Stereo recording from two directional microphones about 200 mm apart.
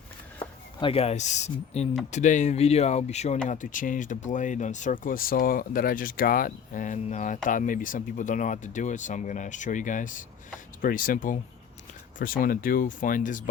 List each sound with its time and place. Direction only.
0.3 s speech: 25° left (ahead or behind)